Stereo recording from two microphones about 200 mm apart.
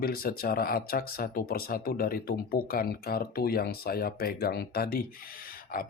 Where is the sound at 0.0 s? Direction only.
50° left (ahead or behind).